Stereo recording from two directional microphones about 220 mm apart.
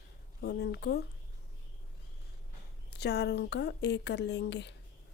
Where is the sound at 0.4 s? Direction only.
50° left (ahead or behind).